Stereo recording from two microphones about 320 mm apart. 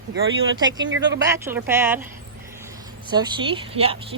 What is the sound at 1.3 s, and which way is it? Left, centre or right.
Speech, centre.